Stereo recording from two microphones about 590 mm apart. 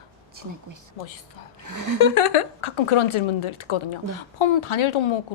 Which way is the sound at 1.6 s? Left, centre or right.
Right.